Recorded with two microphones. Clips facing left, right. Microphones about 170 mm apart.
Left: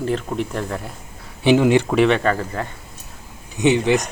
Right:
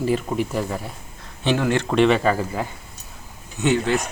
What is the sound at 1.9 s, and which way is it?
Speech, centre (ahead or behind).